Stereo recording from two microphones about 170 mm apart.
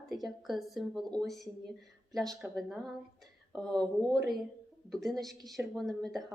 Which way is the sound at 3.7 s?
25° right (ahead or behind).